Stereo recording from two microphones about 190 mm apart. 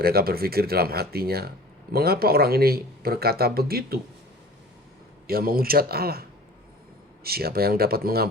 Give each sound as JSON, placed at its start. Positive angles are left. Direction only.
{"t": 0.0, "sound": "speech", "side_deg": -55}
{"t": 5.3, "sound": "speech", "side_deg": -50}
{"t": 7.3, "sound": "speech", "side_deg": -55}